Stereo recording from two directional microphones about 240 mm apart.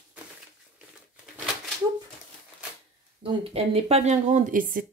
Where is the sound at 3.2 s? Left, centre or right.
Right.